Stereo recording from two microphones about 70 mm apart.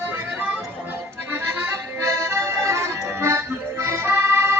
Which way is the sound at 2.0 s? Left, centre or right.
Right.